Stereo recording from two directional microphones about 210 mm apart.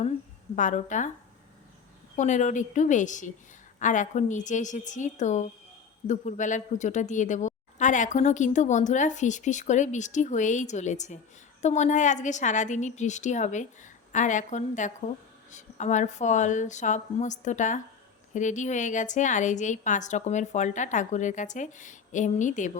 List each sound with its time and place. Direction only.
0.5 s a woman's voice: 35° left (ahead or behind)
2.1 s a woman's voice: 35° left (ahead or behind)